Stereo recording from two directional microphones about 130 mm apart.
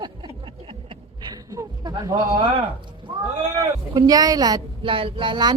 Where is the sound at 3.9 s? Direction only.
30° right (ahead or behind).